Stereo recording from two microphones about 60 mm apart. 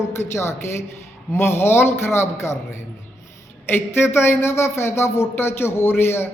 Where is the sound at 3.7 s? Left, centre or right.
Left.